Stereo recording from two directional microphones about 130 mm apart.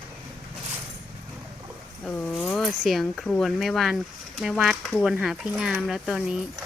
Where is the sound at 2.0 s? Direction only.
10° left (ahead or behind).